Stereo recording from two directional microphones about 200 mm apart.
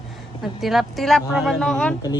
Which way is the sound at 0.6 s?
Centre (ahead or behind).